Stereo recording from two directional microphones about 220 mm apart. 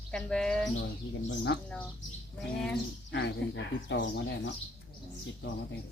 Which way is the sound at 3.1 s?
55° left (ahead or behind).